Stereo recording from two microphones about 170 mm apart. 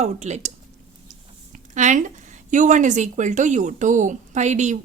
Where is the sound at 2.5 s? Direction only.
45° right (ahead or behind).